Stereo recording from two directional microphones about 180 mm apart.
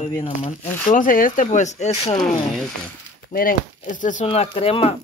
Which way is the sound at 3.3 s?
50° left (ahead or behind).